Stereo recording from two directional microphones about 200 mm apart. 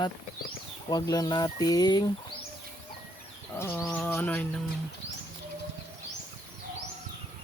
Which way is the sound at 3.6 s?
15° left (ahead or behind).